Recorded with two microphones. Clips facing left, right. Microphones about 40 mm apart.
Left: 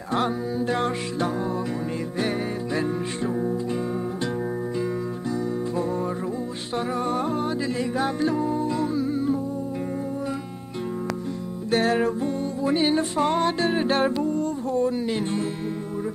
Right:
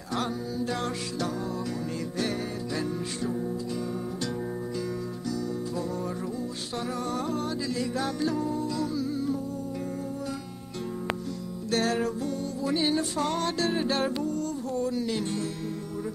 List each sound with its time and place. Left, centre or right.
0.1 s music: left
7.1 s music: left
11.7 s music: left